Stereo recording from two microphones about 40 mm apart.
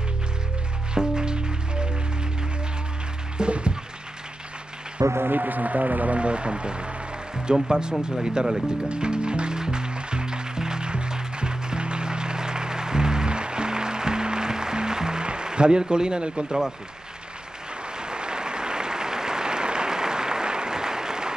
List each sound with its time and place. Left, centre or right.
0.9 s music: centre
3.3 s music: right
5.1 s speech: right
6.1 s speech: right
8.8 s music: right
16.4 s speech: centre
17.9 s applause: right